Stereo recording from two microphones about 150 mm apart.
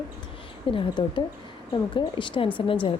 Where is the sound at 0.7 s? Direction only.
35° left (ahead or behind).